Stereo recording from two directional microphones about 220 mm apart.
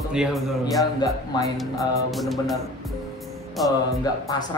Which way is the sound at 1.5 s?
Centre (ahead or behind).